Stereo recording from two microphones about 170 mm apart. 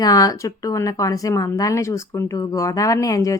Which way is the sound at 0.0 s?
20° left (ahead or behind).